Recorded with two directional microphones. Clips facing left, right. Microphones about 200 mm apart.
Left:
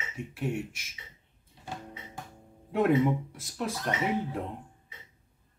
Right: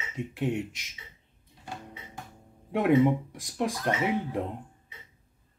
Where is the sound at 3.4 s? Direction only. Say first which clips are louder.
Right 4 dB; 15° right (ahead or behind).